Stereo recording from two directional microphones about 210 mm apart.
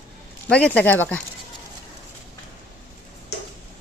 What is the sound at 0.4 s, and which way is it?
Speech, 5° left (ahead or behind).